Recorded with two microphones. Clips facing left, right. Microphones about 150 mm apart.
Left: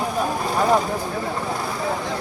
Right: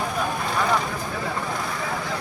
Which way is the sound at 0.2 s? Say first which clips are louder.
Left 4 dB; 35° left (ahead or behind).